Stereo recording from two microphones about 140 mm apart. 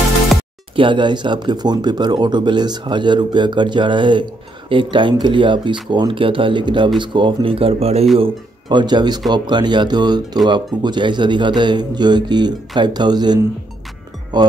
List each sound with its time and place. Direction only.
0.7 s speech: 35° right (ahead or behind)
8.2 s speech: 30° right (ahead or behind)